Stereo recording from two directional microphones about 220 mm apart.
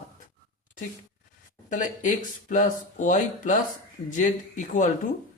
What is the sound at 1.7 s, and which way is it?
A man's voice, 35° left (ahead or behind).